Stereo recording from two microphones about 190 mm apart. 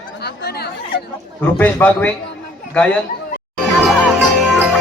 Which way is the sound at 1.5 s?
10° left (ahead or behind).